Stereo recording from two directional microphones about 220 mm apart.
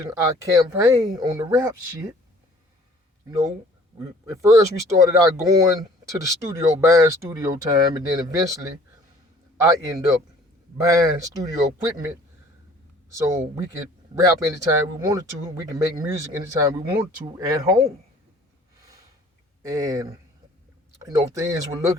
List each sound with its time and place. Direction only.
0.0 s speech: 15° right (ahead or behind)
3.9 s speech: 15° right (ahead or behind)
13.1 s speech: 15° right (ahead or behind)
14.4 s speech: 15° right (ahead or behind)
19.6 s speech: 15° right (ahead or behind)